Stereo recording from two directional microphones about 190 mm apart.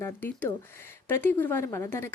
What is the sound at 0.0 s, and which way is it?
A woman's voice, 10° left (ahead or behind).